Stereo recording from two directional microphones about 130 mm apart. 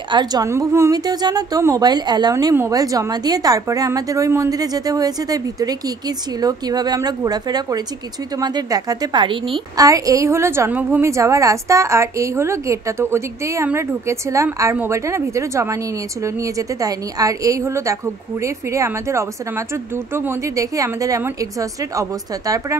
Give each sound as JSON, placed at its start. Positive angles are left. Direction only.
{"t": 0.1, "sound": "a woman's voice", "side_deg": -30}
{"t": 2.3, "sound": "a woman's voice", "side_deg": -20}
{"t": 9.8, "sound": "a woman's voice", "side_deg": -25}